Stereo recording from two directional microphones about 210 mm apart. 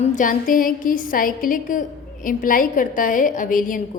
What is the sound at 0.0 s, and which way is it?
A woman's voice, 40° left (ahead or behind).